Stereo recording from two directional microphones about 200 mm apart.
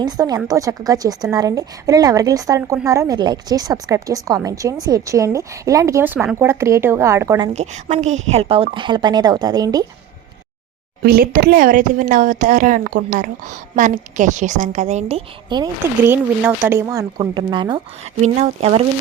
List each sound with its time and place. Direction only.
0.0 s a woman's voice: 20° right (ahead or behind)
7.5 s a woman's voice: 35° right (ahead or behind); by 9.8 s 20° right (ahead or behind)
11.0 s a woman's voice: 50° right (ahead or behind); by 18.8 s 30° right (ahead or behind)